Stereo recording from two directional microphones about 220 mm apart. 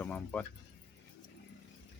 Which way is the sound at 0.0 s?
5° left (ahead or behind).